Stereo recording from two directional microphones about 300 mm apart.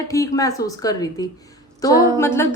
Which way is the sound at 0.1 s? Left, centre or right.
Centre.